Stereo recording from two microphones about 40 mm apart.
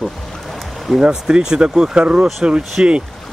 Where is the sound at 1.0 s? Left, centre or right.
Right.